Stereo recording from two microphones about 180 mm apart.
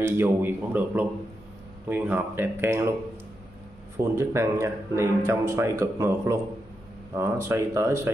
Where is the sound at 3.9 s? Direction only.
15° right (ahead or behind).